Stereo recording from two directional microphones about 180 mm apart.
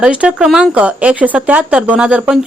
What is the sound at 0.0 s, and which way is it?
A woman's voice, 5° right (ahead or behind).